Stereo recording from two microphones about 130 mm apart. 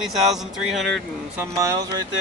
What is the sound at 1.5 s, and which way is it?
Speech, 25° right (ahead or behind).